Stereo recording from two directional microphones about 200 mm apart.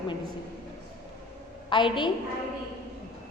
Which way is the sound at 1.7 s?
25° left (ahead or behind).